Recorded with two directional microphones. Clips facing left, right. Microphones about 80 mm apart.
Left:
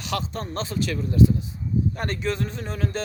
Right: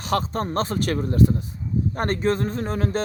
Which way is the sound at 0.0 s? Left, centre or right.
Right.